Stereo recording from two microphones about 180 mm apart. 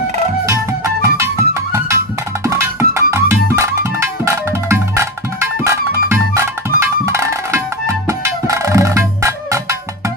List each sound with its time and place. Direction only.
0.5 s music: 15° right (ahead or behind)